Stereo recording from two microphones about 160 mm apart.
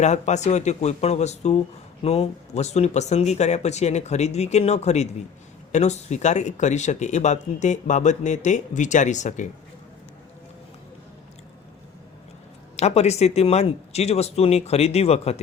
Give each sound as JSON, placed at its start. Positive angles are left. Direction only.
{"t": 0.0, "sound": "speech", "side_deg": 45}
{"t": 12.7, "sound": "speech", "side_deg": 45}